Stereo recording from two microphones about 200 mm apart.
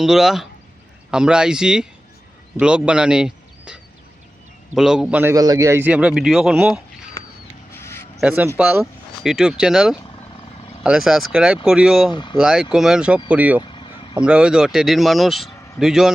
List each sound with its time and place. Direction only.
0.0 s a man's voice: centre (ahead or behind)
7.7 s a sound: 10° left (ahead or behind)
8.2 s a man's voice: 5° right (ahead or behind)
12.1 s speech: 25° left (ahead or behind)
12.4 s a man's voice: 5° right (ahead or behind)
13.6 s vehicle: 25° left (ahead or behind)
14.2 s a man's voice: 5° right (ahead or behind)